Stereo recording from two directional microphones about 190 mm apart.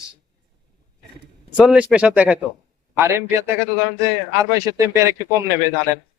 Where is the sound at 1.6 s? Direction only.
5° right (ahead or behind).